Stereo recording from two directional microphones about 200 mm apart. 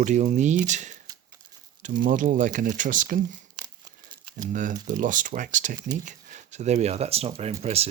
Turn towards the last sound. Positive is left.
turn(degrees=-30)  # may be behind; listen again after turning